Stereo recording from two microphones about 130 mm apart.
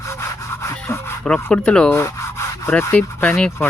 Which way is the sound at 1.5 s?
5° left (ahead or behind).